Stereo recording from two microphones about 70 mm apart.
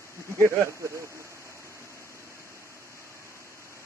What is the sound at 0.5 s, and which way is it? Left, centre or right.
Speech, right.